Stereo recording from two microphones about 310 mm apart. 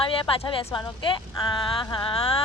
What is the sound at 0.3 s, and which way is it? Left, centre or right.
Speech, centre.